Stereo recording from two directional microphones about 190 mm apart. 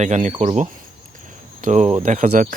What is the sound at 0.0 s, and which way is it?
Speech, 40° right (ahead or behind).